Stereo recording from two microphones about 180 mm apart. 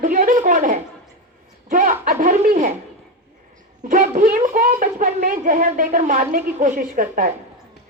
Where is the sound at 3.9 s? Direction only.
45° right (ahead or behind).